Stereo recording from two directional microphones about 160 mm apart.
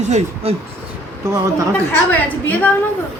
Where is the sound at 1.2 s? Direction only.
20° right (ahead or behind).